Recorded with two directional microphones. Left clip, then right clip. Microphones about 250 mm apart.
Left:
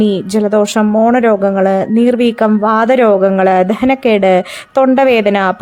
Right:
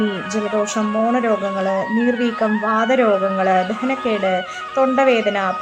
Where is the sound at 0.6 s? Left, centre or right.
Left.